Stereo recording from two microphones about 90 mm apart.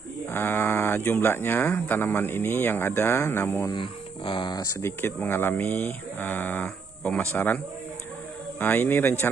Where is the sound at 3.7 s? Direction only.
65° left (ahead or behind).